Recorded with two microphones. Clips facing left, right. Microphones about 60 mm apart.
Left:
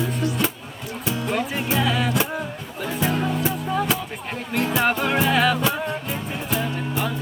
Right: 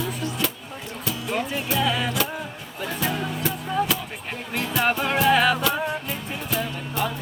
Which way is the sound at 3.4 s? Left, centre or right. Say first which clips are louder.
Left 2 dB; left.